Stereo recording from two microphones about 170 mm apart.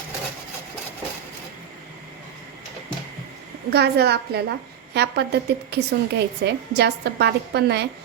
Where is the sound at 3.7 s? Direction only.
70° right (ahead or behind).